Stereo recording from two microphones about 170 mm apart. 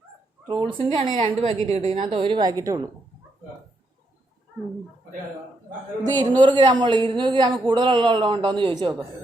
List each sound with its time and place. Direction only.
0.4 s a woman's voice: 30° right (ahead or behind)
6.0 s a woman's voice: 25° right (ahead or behind)